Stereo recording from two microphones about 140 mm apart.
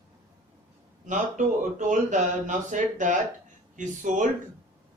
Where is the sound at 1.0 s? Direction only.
65° right (ahead or behind).